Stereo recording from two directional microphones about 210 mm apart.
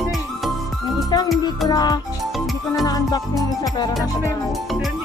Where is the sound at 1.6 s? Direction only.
20° left (ahead or behind).